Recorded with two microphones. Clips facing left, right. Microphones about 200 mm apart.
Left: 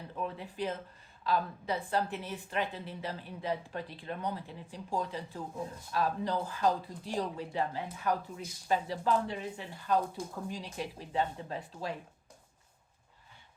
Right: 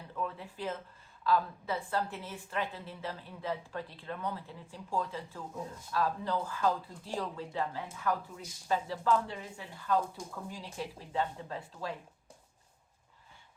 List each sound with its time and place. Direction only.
0.2 s a woman's voice: 20° left (ahead or behind)